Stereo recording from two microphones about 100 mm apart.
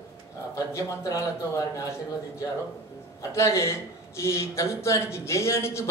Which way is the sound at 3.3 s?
30° left (ahead or behind).